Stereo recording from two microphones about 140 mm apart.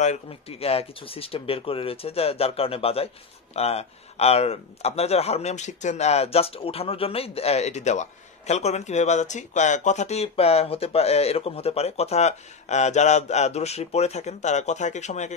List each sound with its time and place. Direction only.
0.0 s speech: 50° left (ahead or behind)